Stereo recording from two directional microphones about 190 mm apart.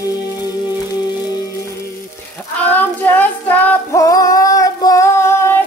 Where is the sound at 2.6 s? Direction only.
10° left (ahead or behind).